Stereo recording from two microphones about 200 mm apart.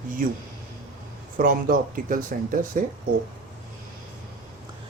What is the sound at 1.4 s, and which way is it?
Speech, 40° right (ahead or behind).